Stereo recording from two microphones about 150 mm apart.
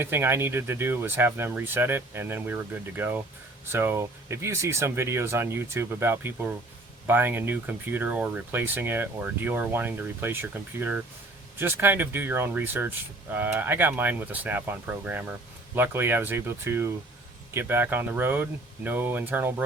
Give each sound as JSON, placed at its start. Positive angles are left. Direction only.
{"t": 0.0, "sound": "speech", "side_deg": -15}